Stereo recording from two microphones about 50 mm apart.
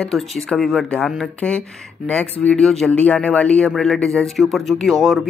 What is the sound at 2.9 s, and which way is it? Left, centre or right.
Speech, left.